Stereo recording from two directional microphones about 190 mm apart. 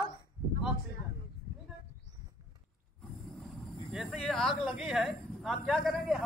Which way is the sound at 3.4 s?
Centre (ahead or behind).